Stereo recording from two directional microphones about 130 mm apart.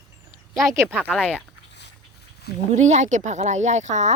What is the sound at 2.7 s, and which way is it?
Speech, 60° right (ahead or behind).